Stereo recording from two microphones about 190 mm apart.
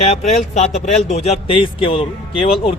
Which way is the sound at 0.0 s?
35° left (ahead or behind).